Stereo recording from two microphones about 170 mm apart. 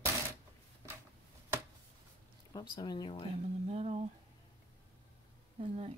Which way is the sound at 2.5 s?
25° left (ahead or behind).